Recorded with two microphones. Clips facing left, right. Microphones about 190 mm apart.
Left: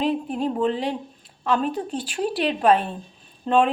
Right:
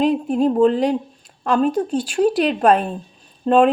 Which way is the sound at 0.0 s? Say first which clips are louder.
Right 6 dB; 45° right (ahead or behind).